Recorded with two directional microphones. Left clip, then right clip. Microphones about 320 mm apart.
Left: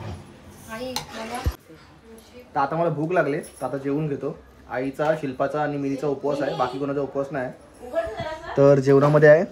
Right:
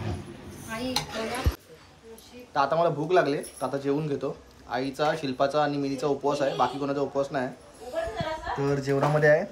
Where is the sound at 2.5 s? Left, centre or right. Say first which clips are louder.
Left 1 dB; centre.